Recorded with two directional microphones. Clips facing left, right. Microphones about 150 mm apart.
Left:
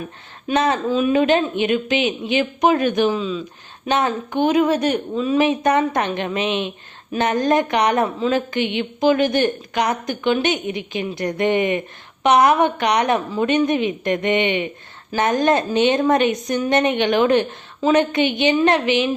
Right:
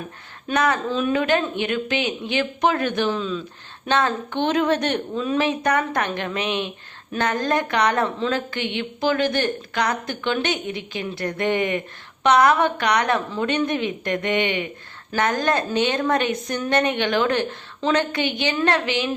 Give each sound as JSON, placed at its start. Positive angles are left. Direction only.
{"t": 0.5, "sound": "a woman's voice", "side_deg": 25}
{"t": 0.9, "sound": "speech", "side_deg": 10}
{"t": 5.4, "sound": "a woman's voice", "side_deg": 20}
{"t": 17.7, "sound": "a woman's voice", "side_deg": 10}
{"t": 18.1, "sound": "a woman's voice", "side_deg": 20}